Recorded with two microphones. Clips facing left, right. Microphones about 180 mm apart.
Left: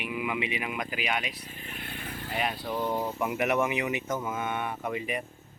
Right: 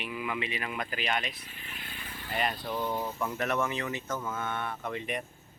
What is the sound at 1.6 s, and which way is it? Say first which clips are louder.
Vehicle: left 5 dB; 50° left (ahead or behind).